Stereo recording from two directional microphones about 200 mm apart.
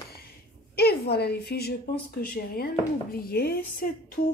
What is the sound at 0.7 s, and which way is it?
Speech, 55° left (ahead or behind).